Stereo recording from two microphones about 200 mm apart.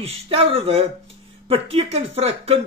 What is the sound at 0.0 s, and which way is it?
Speech, 30° right (ahead or behind).